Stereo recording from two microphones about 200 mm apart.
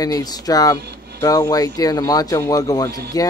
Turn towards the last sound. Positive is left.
turn(degrees=15)  # may be behind; listen again after turning